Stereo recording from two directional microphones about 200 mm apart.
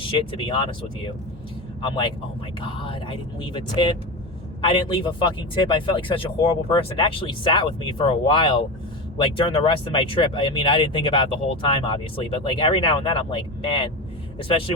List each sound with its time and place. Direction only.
0.0 s speech: 25° left (ahead or behind)
1.8 s speech: 25° left (ahead or behind)